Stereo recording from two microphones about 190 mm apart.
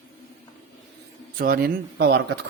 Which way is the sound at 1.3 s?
50° right (ahead or behind).